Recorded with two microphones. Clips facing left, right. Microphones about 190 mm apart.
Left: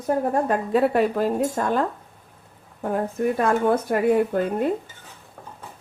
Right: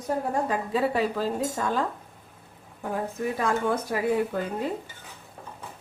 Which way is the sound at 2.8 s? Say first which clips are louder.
Left 6 dB; 55° left (ahead or behind).